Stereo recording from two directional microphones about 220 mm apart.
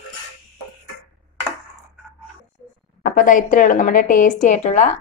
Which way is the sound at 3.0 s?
35° left (ahead or behind).